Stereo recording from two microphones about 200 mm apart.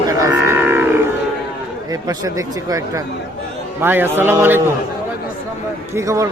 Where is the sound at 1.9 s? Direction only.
15° right (ahead or behind).